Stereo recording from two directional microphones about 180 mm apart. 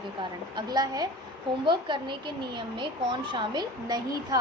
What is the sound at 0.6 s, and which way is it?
A woman's voice, 20° right (ahead or behind).